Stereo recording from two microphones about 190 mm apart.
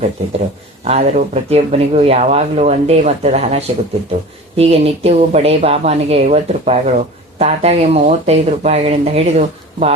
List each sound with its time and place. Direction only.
0.9 s speech: 35° right (ahead or behind)